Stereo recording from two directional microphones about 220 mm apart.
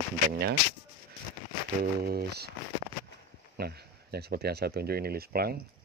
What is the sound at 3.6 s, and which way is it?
Speech, 45° right (ahead or behind).